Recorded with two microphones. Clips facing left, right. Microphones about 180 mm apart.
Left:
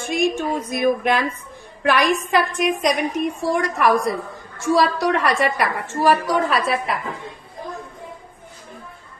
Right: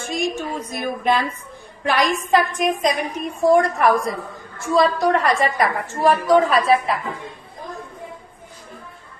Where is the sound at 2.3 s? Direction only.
70° left (ahead or behind).